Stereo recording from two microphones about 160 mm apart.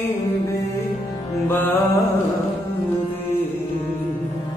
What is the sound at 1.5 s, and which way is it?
Music, 10° left (ahead or behind).